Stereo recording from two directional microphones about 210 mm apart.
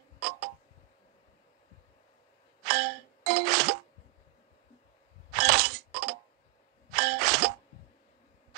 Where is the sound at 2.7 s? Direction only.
45° right (ahead or behind).